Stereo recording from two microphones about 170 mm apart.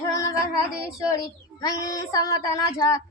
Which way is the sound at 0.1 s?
20° left (ahead or behind).